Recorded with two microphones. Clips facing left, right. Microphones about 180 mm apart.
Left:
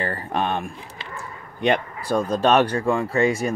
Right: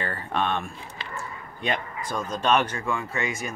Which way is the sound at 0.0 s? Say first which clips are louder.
Left 3 dB; 40° left (ahead or behind).